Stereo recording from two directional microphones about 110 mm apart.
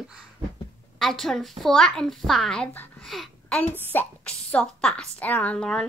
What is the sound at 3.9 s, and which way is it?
A woman's voice, 15° left (ahead or behind).